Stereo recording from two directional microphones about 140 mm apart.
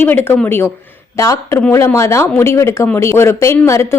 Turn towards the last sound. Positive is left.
turn(degrees=20)  # may be behind; listen again after turning